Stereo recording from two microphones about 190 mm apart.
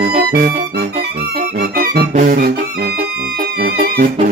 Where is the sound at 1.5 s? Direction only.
50° right (ahead or behind).